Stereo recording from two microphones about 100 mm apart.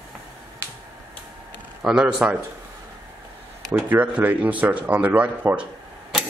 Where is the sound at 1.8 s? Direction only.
5° right (ahead or behind).